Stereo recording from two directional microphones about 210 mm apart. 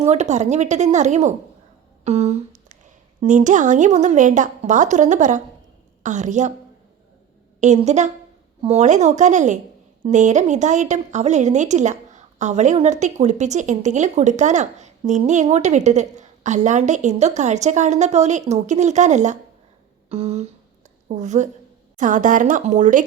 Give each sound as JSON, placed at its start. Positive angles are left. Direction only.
{"t": 0.0, "sound": "a woman's voice", "side_deg": -35}
{"t": 7.6, "sound": "a woman's voice", "side_deg": -35}
{"t": 20.1, "sound": "a sound", "side_deg": -30}
{"t": 21.1, "sound": "a woman's voice", "side_deg": -35}